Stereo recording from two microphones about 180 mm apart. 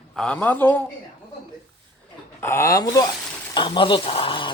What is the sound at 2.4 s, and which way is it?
Speech, 15° left (ahead or behind).